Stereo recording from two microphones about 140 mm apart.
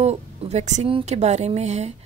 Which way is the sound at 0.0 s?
50° right (ahead or behind).